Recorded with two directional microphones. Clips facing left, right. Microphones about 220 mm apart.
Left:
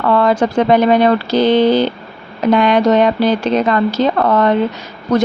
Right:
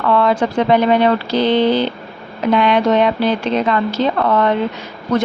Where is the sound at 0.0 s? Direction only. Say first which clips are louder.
Left 2 dB; 45° left (ahead or behind).